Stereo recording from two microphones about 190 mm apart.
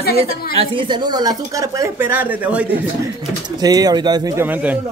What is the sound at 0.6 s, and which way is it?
Speech, 25° right (ahead or behind).